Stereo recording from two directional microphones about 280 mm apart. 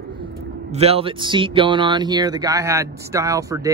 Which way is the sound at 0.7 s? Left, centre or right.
Right.